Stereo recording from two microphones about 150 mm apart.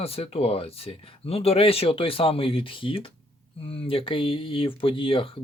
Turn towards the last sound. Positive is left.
turn(degrees=35)  # may be behind; listen again after turning